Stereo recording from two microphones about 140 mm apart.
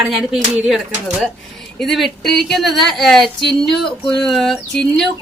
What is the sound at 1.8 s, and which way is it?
A woman's voice, centre (ahead or behind).